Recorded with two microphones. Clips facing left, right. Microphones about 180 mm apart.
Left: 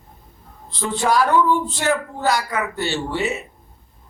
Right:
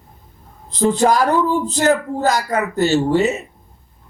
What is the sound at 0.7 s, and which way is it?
A man's voice, 40° right (ahead or behind).